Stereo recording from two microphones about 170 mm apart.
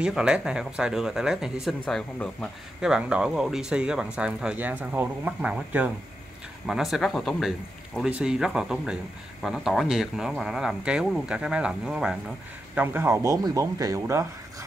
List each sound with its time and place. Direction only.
0.0 s speech: 5° right (ahead or behind)